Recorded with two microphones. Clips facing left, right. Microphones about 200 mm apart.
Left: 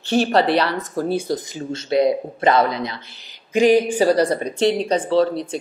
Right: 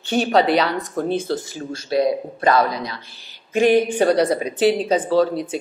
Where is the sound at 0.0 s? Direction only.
Centre (ahead or behind); by 3.0 s 25° left (ahead or behind).